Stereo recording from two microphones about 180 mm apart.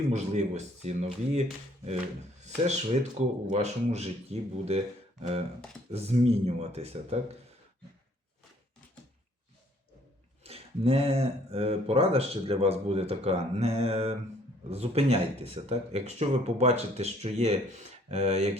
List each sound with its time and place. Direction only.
0.1 s speech: 40° right (ahead or behind)
10.4 s speech: 35° right (ahead or behind)